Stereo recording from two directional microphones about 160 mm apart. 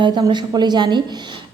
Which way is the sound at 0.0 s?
30° right (ahead or behind).